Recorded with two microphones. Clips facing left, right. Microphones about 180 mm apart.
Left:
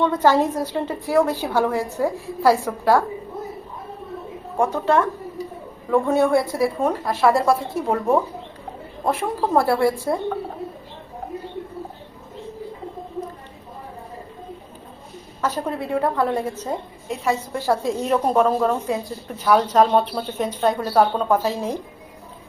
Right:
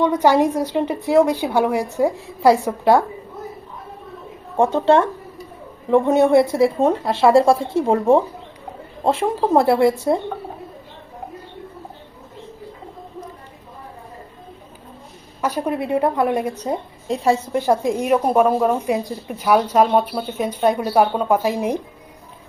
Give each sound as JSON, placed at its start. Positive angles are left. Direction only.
{"t": 0.0, "sound": "a woman's voice", "side_deg": -15}
{"t": 4.5, "sound": "a woman's voice", "side_deg": -25}
{"t": 15.4, "sound": "a woman's voice", "side_deg": -15}